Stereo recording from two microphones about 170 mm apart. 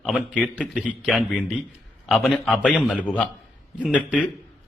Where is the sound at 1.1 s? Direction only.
5° right (ahead or behind).